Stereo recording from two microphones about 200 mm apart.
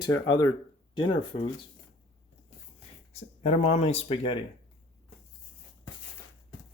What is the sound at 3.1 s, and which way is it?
Speech, 30° left (ahead or behind).